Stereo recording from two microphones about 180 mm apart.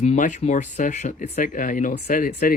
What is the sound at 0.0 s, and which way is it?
Speech, 40° left (ahead or behind).